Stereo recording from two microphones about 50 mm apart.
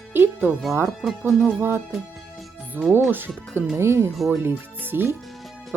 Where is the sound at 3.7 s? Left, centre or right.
Right.